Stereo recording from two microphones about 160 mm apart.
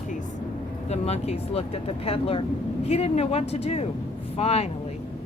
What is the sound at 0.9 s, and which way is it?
Speech, 40° left (ahead or behind).